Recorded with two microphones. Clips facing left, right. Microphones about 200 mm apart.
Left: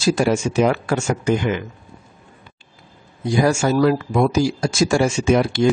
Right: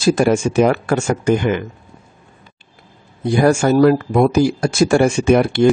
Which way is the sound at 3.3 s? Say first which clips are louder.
Right 4 dB; 55° right (ahead or behind).